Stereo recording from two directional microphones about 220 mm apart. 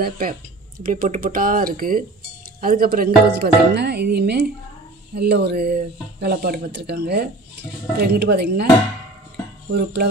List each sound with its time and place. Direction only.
0.0 s speech: 40° right (ahead or behind)
9.7 s speech: 45° right (ahead or behind)